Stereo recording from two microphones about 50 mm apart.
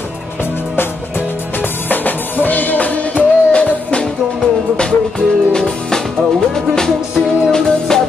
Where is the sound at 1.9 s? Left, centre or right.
Left.